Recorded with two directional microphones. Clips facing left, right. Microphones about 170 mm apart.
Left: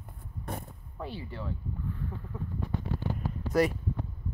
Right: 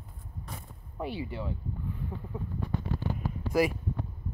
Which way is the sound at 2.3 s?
10° right (ahead or behind).